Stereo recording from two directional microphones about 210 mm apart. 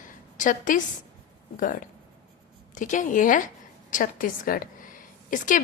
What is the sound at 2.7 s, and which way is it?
A woman's voice, 35° left (ahead or behind).